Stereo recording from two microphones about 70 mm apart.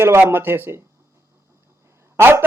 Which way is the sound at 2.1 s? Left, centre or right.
Right.